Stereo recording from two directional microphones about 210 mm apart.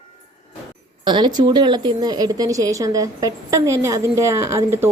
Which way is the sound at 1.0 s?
20° right (ahead or behind).